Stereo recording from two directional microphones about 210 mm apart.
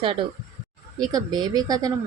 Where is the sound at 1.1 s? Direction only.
20° right (ahead or behind).